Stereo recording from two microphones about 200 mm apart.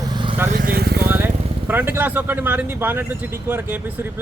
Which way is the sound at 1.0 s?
10° right (ahead or behind).